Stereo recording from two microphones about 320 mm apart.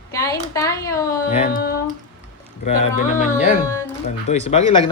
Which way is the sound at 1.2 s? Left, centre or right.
Left.